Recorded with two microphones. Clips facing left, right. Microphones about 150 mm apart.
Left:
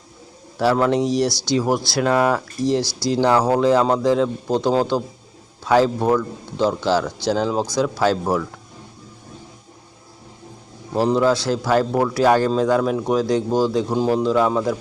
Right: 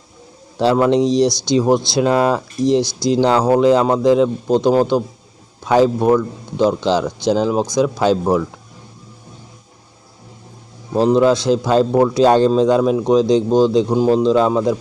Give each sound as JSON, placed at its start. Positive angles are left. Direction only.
{"t": 0.5, "sound": "speech", "side_deg": -20}
{"t": 10.9, "sound": "speech", "side_deg": -20}